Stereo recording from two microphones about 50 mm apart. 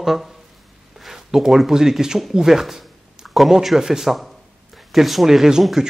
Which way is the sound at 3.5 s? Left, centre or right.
Centre.